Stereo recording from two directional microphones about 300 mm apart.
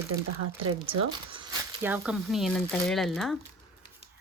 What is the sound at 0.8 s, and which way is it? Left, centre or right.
Speech, centre.